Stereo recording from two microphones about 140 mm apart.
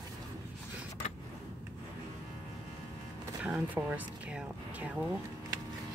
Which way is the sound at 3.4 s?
10° right (ahead or behind).